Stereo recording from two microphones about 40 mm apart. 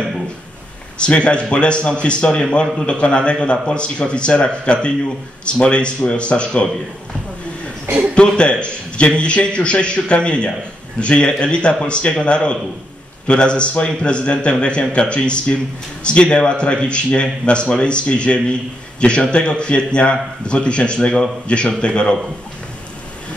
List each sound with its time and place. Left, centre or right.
0.9 s speech: left
8.1 s speech: left